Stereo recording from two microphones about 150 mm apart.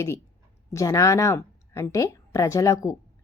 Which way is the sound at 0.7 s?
20° left (ahead or behind).